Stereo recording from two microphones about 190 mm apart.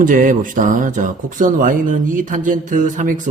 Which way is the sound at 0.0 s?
45° right (ahead or behind).